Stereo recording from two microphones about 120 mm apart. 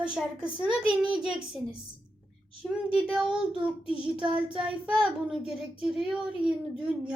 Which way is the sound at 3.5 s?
45° right (ahead or behind).